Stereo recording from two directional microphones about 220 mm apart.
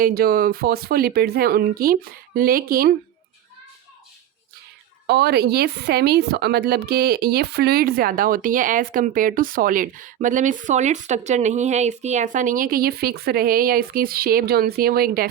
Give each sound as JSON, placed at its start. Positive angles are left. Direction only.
{"t": 0.0, "sound": "speech", "side_deg": -45}
{"t": 5.0, "sound": "speech", "side_deg": -50}